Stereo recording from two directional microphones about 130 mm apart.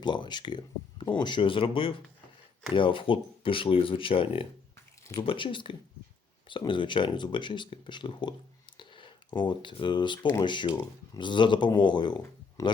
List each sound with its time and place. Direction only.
0.0 s speech: 35° left (ahead or behind)
8.8 s a sound: 40° left (ahead or behind)
9.4 s speech: 35° left (ahead or behind)